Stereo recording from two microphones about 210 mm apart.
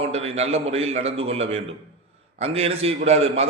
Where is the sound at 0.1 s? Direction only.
30° right (ahead or behind).